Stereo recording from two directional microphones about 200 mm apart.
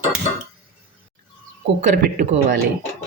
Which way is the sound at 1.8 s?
40° right (ahead or behind).